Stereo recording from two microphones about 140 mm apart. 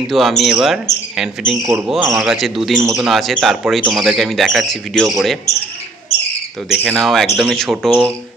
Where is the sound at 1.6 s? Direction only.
20° right (ahead or behind).